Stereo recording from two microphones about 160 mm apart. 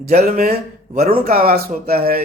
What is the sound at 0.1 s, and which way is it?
Speech, 65° right (ahead or behind).